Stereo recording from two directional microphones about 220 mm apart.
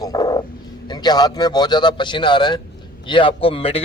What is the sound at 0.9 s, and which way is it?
Speech, 20° left (ahead or behind).